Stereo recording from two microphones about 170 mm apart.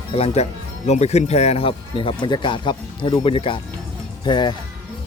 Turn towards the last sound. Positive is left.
turn(degrees=25)  # may be behind; listen again after turning